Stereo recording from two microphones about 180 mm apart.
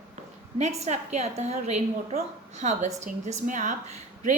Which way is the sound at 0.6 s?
35° right (ahead or behind).